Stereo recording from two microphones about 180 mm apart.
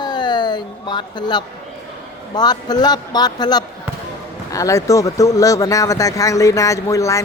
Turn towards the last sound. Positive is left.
turn(degrees=15)  # may be behind; listen again after turning